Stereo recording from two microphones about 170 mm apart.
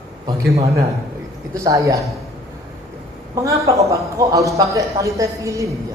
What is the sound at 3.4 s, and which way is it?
A man's voice, 20° right (ahead or behind).